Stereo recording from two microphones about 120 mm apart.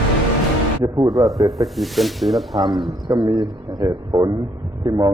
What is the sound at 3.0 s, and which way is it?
A man's voice, 30° right (ahead or behind).